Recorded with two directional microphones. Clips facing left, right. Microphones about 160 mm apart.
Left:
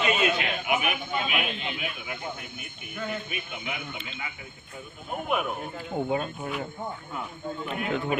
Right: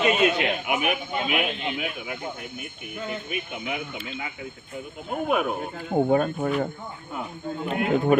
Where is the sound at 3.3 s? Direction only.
55° right (ahead or behind).